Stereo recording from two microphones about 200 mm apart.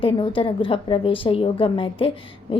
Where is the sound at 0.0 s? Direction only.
25° left (ahead or behind).